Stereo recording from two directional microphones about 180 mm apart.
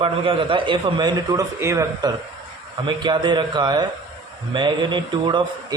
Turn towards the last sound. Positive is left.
turn(degrees=-25)  # may be behind; listen again after turning